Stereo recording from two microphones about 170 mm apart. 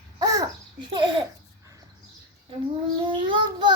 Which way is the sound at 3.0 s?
30° right (ahead or behind).